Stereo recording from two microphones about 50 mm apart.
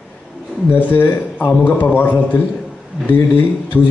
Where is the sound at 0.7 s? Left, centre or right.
Left.